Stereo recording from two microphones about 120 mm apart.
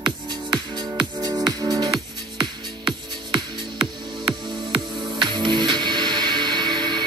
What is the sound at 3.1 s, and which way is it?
Music, 40° right (ahead or behind).